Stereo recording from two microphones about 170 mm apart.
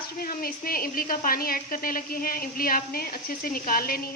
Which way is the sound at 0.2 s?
60° left (ahead or behind).